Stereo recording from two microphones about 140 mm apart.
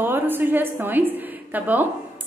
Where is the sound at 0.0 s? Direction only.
15° right (ahead or behind).